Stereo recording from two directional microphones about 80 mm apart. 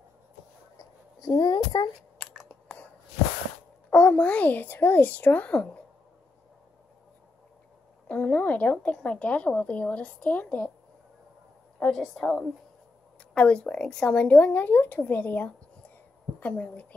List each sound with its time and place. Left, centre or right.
0.7 s a sound: left
3.9 s speech: centre
8.1 s a woman's voice: left
11.9 s a woman's voice: centre
13.3 s a woman's voice: centre